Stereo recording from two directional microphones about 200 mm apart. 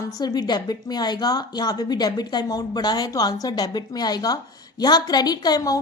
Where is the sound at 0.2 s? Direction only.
20° left (ahead or behind).